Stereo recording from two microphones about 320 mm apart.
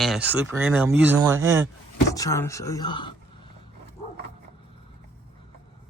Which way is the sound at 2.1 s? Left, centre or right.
Centre.